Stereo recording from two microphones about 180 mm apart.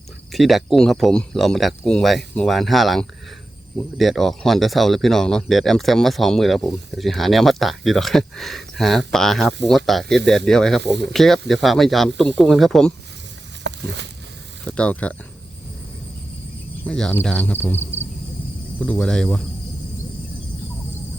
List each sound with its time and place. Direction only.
0.3 s speech: centre (ahead or behind)
13.7 s a sound: 75° right (ahead or behind)
14.6 s speech: 5° left (ahead or behind)
16.8 s speech: 5° left (ahead or behind)